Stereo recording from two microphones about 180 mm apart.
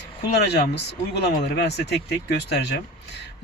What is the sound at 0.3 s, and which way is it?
A man's voice, 65° left (ahead or behind).